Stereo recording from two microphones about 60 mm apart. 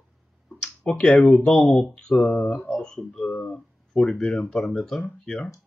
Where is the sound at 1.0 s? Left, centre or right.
Centre.